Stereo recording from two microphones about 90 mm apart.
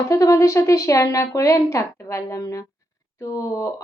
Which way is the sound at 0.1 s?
35° left (ahead or behind).